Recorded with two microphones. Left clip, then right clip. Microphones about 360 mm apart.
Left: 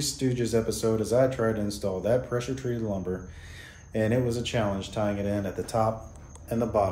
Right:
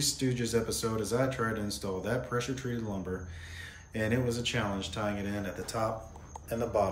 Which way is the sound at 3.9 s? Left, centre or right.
Centre.